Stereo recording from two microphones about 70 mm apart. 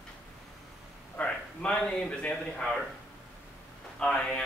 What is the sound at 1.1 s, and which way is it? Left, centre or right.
A man's voice, centre.